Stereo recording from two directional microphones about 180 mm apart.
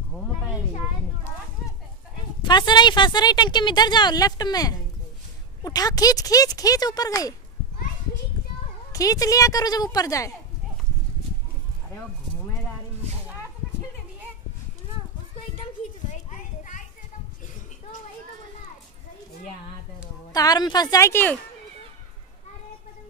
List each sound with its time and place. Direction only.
2.4 s speech: 25° left (ahead or behind)
8.9 s speech: 20° left (ahead or behind)
16.1 s a sound: 45° left (ahead or behind)
20.3 s speech: 20° left (ahead or behind)